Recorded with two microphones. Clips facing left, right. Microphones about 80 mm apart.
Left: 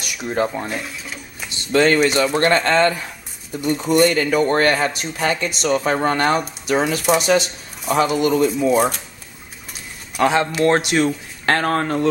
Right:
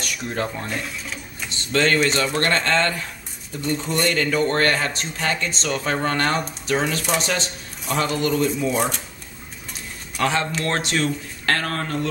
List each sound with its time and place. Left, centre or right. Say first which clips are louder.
0.0 s speech: left 5 dB; centre
10.1 s speech: left 5 dB; centre; by 12.1 s left